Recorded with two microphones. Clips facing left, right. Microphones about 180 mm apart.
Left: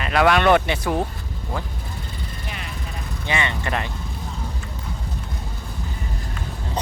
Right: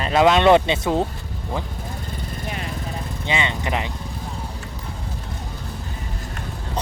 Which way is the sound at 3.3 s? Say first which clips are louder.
Right 1 dB; 15° right (ahead or behind).